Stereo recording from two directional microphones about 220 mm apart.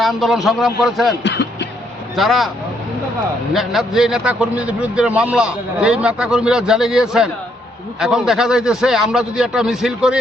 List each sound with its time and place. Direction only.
0.0 s a man's voice: centre (ahead or behind)
1.2 s speech: 55° left (ahead or behind)
2.1 s a man's voice: centre (ahead or behind)
3.5 s a man's voice: centre (ahead or behind)